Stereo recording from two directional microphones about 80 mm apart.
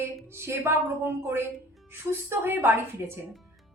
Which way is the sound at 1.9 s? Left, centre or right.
Right.